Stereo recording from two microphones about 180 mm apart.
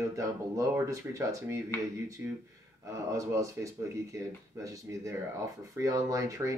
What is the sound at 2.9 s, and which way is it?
Speech, 15° right (ahead or behind).